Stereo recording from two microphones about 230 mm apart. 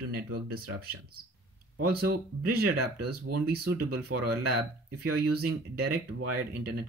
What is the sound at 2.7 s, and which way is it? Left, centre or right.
Speech, right.